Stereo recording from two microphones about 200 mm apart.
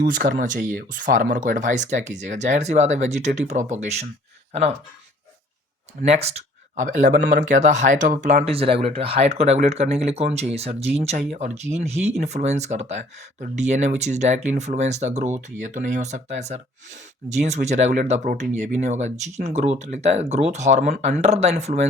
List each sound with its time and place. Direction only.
0.0 s speech: 45° right (ahead or behind)
6.0 s speech: 35° right (ahead or behind)